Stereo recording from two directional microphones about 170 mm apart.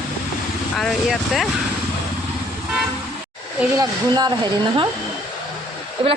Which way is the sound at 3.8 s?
25° right (ahead or behind).